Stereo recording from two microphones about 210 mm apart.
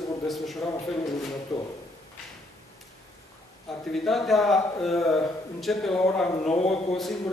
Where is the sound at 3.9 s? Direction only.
Centre (ahead or behind).